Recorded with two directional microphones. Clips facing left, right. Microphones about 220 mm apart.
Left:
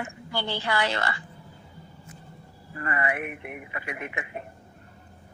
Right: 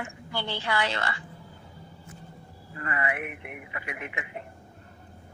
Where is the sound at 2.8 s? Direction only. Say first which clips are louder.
Left 2 dB; 35° left (ahead or behind).